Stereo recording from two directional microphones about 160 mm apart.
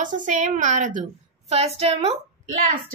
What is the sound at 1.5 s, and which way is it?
Speech, 40° right (ahead or behind).